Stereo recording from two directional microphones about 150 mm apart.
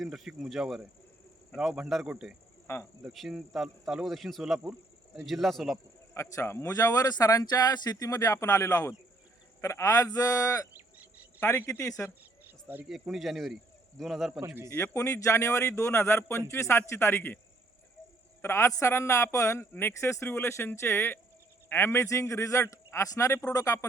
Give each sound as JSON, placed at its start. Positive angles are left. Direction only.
{"t": 0.0, "sound": "speech", "side_deg": 0}
{"t": 6.1, "sound": "speech", "side_deg": 20}
{"t": 12.5, "sound": "cricket", "side_deg": -10}
{"t": 12.9, "sound": "speech", "side_deg": 0}
{"t": 14.4, "sound": "a man's voice", "side_deg": -20}
{"t": 14.7, "sound": "speech", "side_deg": 20}
{"t": 18.4, "sound": "speech", "side_deg": 20}